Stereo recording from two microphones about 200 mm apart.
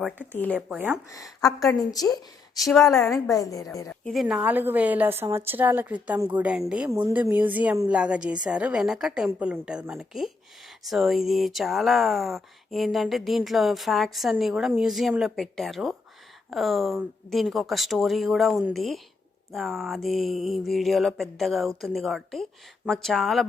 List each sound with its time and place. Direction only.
0.5 s a woman's voice: 10° right (ahead or behind)
1.1 s a woman's voice: 15° left (ahead or behind)
2.6 s speech: centre (ahead or behind)
3.3 s a woman's voice: 15° left (ahead or behind)
4.1 s a woman's voice: centre (ahead or behind)